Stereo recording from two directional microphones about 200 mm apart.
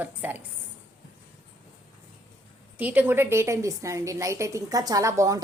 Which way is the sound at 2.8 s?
10° right (ahead or behind).